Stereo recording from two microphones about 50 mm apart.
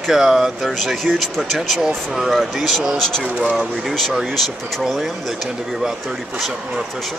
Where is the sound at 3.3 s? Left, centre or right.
Centre.